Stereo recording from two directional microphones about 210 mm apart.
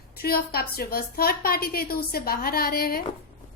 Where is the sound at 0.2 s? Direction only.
45° left (ahead or behind).